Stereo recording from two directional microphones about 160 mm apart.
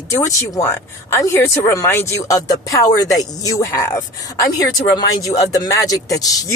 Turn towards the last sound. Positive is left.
turn(degrees=20)  # may be behind; listen again after turning